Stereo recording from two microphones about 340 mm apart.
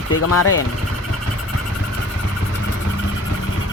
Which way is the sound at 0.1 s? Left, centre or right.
Left.